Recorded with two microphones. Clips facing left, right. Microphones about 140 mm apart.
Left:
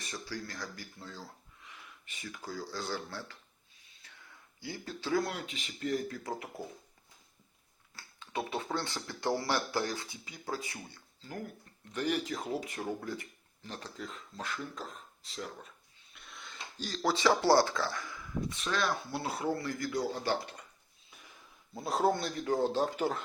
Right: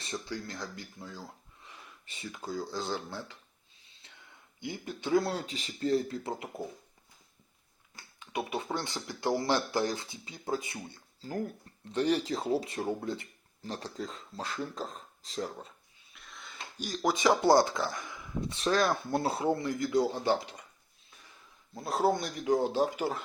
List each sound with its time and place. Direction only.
0.0 s speech: 25° right (ahead or behind)
1.6 s speech: 35° right (ahead or behind)
4.0 s a sound: 25° right (ahead or behind)
4.6 s speech: 20° right (ahead or behind)
5.2 s speech: 35° right (ahead or behind)
7.9 s speech: 15° right (ahead or behind)
11.2 s speech: 40° right (ahead or behind)
16.1 s wheeze: centre (ahead or behind)
16.7 s speech: 15° right (ahead or behind)
21.8 s speech: centre (ahead or behind)
22.1 s speech: 15° right (ahead or behind)